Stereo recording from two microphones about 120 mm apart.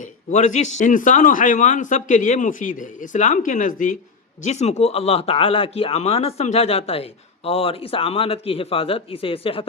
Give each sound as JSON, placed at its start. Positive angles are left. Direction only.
{"t": 0.3, "sound": "a man's voice", "side_deg": 90}
{"t": 4.4, "sound": "speech", "side_deg": 70}